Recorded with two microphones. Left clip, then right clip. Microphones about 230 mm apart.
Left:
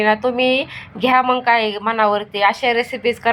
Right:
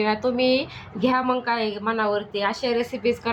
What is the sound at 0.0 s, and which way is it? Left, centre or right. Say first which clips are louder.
Speech: left 6 dB; centre.